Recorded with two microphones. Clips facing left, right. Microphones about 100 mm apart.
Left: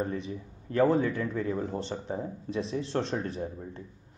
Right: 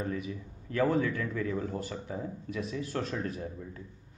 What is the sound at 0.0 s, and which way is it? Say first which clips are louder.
A man's voice: left 2 dB; 30° left (ahead or behind).